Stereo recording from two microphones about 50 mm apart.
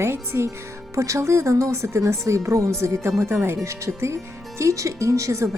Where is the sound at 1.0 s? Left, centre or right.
Right.